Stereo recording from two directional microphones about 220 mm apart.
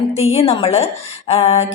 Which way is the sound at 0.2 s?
30° left (ahead or behind).